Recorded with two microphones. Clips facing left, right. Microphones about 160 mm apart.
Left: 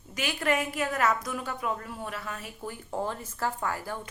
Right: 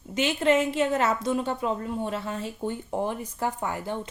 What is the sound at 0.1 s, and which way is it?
A woman's voice, 25° right (ahead or behind).